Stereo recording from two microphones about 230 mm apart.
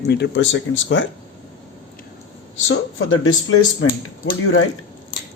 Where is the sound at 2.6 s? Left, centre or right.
Left.